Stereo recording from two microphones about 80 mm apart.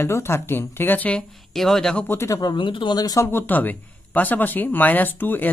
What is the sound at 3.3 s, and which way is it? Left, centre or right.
Speech, left.